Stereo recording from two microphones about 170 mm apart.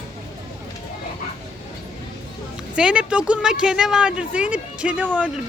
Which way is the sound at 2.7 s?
5° right (ahead or behind).